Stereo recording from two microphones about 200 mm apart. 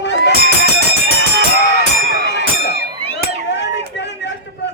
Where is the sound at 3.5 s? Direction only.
60° left (ahead or behind).